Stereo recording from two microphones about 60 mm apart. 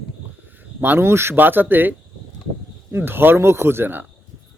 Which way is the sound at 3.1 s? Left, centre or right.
Right.